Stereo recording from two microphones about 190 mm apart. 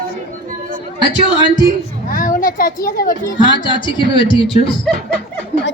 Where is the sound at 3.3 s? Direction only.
25° left (ahead or behind).